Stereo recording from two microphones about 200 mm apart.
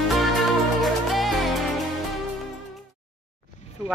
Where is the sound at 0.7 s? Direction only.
Centre (ahead or behind).